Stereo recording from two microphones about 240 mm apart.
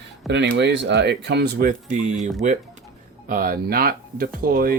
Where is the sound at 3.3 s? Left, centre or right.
Right.